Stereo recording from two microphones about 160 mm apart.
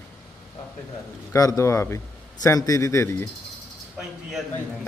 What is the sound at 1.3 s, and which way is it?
A man's voice, 20° left (ahead or behind).